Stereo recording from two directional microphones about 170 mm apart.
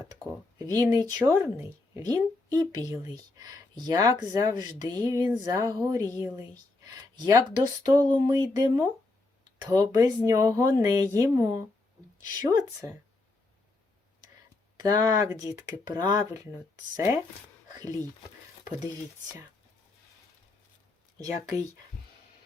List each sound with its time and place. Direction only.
0.6 s speech: 20° right (ahead or behind)
14.8 s speech: 25° right (ahead or behind)